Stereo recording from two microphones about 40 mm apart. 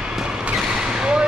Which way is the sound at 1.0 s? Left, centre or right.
Right.